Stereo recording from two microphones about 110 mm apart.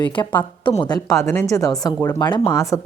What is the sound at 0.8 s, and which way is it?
Speech, 40° left (ahead or behind).